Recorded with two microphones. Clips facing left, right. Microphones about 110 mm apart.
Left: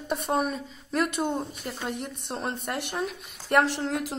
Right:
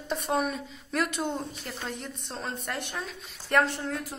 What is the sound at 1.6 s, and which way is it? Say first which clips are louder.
Speech: left 4 dB; 15° left (ahead or behind).